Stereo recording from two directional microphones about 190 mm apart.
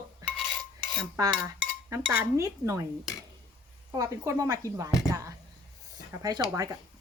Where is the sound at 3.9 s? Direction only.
15° right (ahead or behind).